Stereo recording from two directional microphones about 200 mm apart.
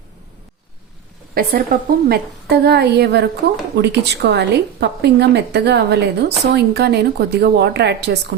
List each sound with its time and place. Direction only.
1.3 s a woman's voice: 50° right (ahead or behind)